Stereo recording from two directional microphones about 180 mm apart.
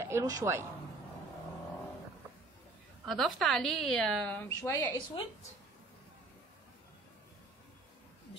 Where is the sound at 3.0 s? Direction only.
Centre (ahead or behind).